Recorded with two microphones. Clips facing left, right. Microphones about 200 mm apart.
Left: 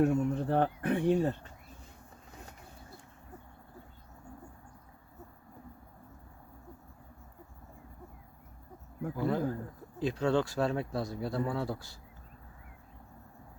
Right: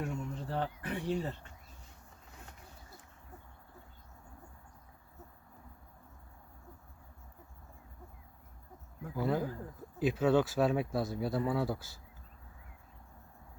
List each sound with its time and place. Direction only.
0.0 s speech: 60° left (ahead or behind)
9.1 s speech: 5° right (ahead or behind)